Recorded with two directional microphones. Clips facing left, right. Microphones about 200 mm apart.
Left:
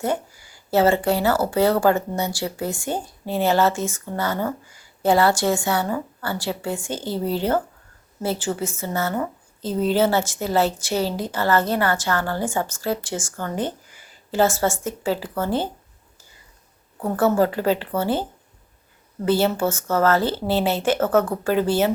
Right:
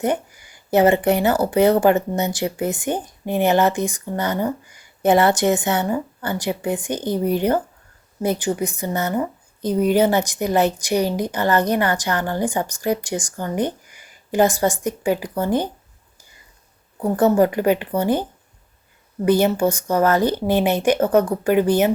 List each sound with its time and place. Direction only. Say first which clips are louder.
0.0 s a woman's voice: right 3 dB; 20° right (ahead or behind)
17.0 s a woman's voice: right 3 dB; 15° right (ahead or behind)